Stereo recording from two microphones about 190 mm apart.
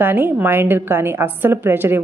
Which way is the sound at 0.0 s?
10° right (ahead or behind).